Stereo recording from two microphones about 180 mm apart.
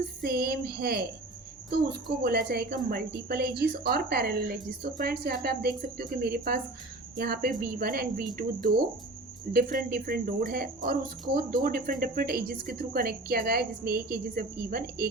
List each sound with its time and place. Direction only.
0.2 s a woman's voice: 60° right (ahead or behind)